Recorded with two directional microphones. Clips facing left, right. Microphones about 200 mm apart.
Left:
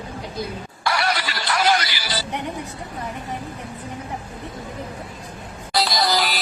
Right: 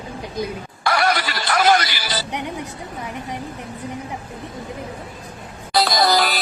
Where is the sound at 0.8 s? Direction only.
50° right (ahead or behind).